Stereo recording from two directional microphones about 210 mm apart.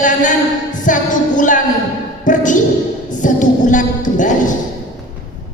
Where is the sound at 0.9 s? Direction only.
40° left (ahead or behind).